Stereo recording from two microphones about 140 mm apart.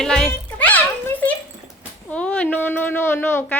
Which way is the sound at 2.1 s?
10° left (ahead or behind).